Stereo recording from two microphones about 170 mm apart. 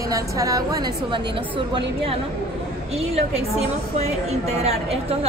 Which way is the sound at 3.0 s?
40° right (ahead or behind).